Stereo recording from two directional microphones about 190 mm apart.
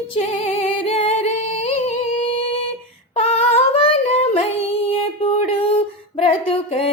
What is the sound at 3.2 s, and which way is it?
Female singing, 30° left (ahead or behind).